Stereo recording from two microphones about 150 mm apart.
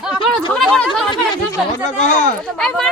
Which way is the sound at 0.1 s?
Centre (ahead or behind).